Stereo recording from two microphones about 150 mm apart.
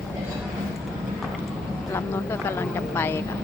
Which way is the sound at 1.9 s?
15° left (ahead or behind).